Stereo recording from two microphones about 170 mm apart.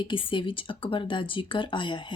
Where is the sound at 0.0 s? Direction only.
30° left (ahead or behind).